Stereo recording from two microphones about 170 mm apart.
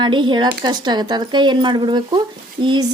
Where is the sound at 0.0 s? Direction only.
25° right (ahead or behind).